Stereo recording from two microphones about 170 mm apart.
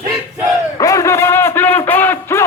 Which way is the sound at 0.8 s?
20° left (ahead or behind).